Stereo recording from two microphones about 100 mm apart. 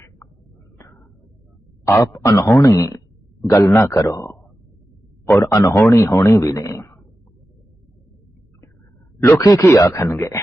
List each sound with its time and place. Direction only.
1.8 s speech: 30° left (ahead or behind)
9.2 s speech: 30° left (ahead or behind)